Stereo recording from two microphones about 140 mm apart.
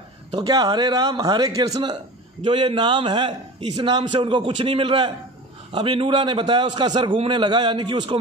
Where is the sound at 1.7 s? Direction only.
40° right (ahead or behind).